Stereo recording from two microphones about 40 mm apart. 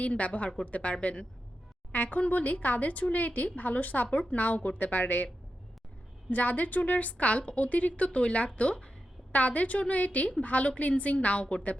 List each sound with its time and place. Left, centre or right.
0.0 s speech: left
6.3 s speech: left